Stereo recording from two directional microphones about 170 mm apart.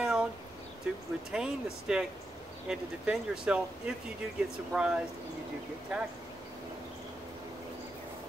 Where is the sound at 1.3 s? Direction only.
5° right (ahead or behind).